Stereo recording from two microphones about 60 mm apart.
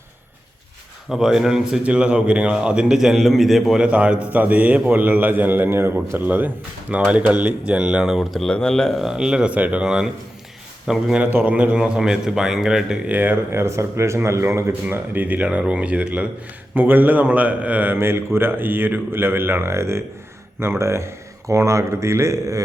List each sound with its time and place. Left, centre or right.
1.1 s a man's voice: centre
1.8 s a man's voice: centre
3.8 s a man's voice: centre
8.4 s speech: centre
9.0 s a man's voice: centre
9.8 s a man's voice: centre
11.4 s a man's voice: right
13.1 s speech: right
14.8 s speech: right
15.4 s a man's voice: centre
16.7 s a man's voice: right
17.9 s speech: right